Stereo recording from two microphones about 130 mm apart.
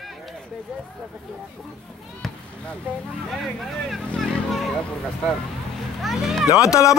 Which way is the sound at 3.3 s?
Centre (ahead or behind).